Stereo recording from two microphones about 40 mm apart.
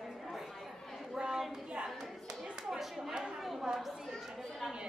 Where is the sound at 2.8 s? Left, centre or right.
Centre.